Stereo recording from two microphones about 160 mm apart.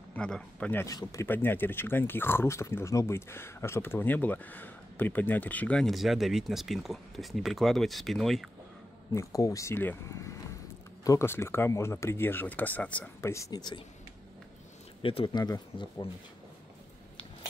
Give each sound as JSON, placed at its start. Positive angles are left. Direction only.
{"t": 0.1, "sound": "speech", "side_deg": 5}
{"t": 0.8, "sound": "speech", "side_deg": 20}
{"t": 9.1, "sound": "speech", "side_deg": 20}
{"t": 15.0, "sound": "speech", "side_deg": 35}